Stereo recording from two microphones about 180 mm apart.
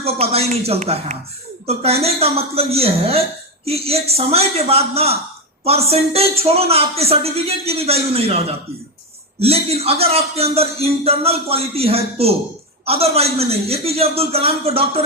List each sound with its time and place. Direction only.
0.0 s a man's voice: 35° right (ahead or behind)